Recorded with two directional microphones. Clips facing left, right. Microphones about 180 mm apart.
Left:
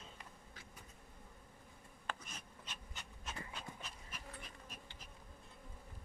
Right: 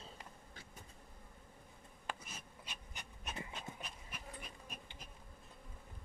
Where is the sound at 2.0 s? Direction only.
10° right (ahead or behind).